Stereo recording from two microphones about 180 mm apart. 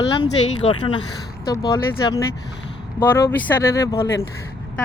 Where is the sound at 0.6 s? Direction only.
25° left (ahead or behind).